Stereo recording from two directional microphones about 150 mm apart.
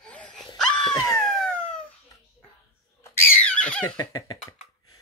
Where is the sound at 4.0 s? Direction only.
25° left (ahead or behind).